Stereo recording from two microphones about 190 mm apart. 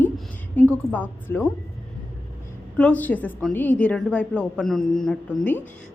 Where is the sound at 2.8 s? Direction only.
10° left (ahead or behind).